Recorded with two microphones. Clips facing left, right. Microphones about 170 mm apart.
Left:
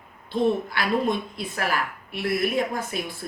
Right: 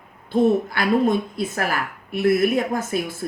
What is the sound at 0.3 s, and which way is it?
A woman's voice, 45° right (ahead or behind).